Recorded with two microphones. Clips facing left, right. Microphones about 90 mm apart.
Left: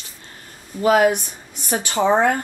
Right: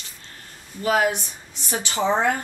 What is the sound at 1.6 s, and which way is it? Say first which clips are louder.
Speech: left 4 dB; 45° left (ahead or behind).